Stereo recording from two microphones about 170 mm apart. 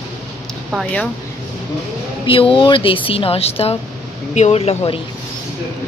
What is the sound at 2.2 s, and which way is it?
Speech, 30° left (ahead or behind).